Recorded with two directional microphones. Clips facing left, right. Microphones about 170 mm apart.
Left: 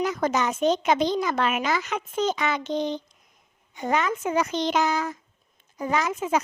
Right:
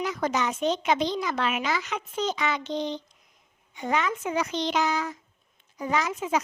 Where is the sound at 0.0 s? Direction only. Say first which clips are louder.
Left 3 dB; 45° left (ahead or behind).